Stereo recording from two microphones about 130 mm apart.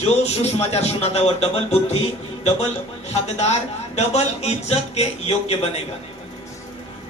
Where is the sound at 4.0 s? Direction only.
55° left (ahead or behind).